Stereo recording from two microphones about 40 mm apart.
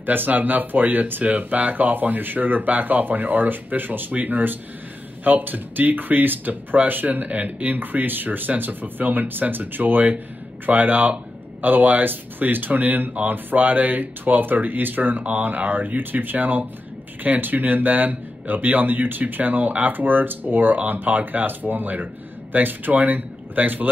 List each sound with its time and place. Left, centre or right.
0.0 s speech: right
7.2 s speech: right